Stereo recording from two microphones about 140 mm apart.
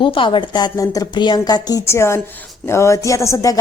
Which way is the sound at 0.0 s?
35° left (ahead or behind).